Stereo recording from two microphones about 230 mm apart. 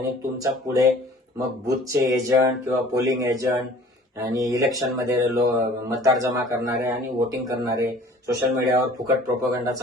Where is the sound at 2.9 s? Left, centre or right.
Centre.